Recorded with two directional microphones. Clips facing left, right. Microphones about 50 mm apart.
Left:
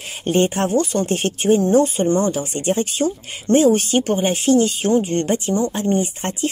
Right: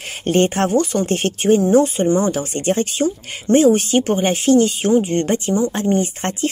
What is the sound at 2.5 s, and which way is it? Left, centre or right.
Speech, right.